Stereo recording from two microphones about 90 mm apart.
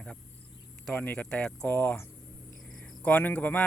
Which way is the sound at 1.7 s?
20° left (ahead or behind).